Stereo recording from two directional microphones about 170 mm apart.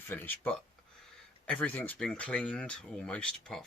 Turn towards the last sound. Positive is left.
turn(degrees=5)  # may be behind; listen again after turning